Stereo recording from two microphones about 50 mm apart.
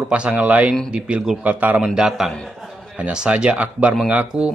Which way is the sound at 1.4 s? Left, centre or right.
Right.